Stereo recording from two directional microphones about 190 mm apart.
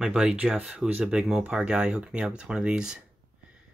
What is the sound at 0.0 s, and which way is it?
Speech, 5° right (ahead or behind).